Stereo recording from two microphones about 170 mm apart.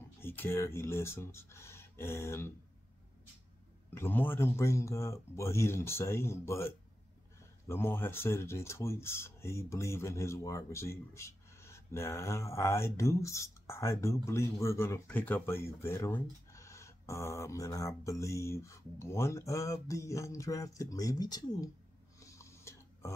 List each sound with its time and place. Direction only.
0.2 s speech: 10° left (ahead or behind)
3.9 s speech: 10° left (ahead or behind)
22.2 s a sound: 15° left (ahead or behind)